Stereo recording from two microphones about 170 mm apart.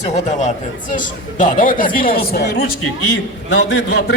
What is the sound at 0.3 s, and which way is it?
Speech, 45° left (ahead or behind).